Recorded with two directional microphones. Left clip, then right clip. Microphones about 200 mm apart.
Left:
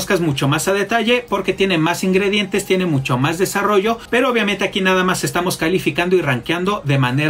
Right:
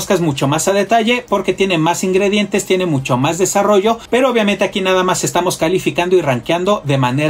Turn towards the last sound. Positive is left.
turn(degrees=25)  # may be behind; listen again after turning